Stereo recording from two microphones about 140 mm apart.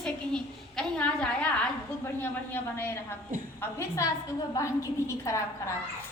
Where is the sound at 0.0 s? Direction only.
5° left (ahead or behind).